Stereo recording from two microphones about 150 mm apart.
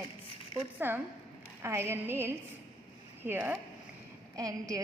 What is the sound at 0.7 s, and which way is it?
A woman's voice, 15° right (ahead or behind).